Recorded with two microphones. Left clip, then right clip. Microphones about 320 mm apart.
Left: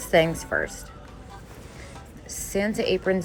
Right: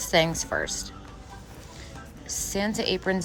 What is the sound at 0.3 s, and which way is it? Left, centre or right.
Speech, centre.